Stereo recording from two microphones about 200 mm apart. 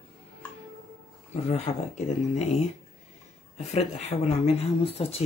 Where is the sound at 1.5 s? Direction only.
35° left (ahead or behind).